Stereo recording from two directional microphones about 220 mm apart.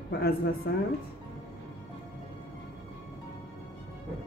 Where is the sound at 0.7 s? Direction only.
50° left (ahead or behind).